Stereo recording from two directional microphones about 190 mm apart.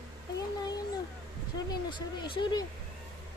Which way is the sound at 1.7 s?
25° left (ahead or behind).